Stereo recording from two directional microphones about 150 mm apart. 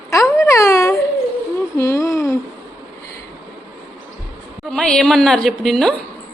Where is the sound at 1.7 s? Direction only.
20° left (ahead or behind).